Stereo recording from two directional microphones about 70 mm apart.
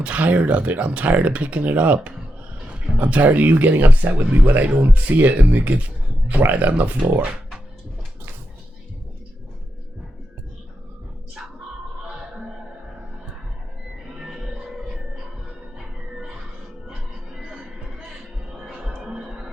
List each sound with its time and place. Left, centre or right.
0.0 s speech: right
14.3 s music: centre
16.9 s music: centre